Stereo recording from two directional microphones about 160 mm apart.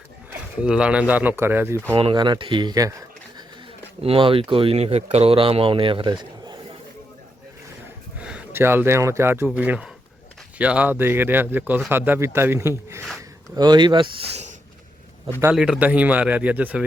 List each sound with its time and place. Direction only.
0.6 s speech: 5° right (ahead or behind)
2.0 s speech: 30° right (ahead or behind)
4.0 s speech: 35° right (ahead or behind)
8.2 s a man's voice: 10° right (ahead or behind)
13.6 s speech: 25° right (ahead or behind)
15.5 s speech: 5° right (ahead or behind)